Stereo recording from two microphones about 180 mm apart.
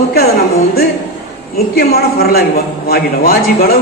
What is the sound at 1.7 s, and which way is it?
A man's voice, 60° left (ahead or behind).